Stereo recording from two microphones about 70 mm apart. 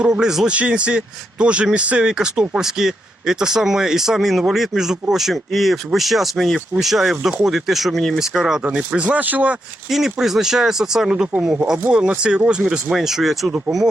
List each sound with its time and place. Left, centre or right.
0.0 s a man's voice: centre
9.9 s a man's voice: centre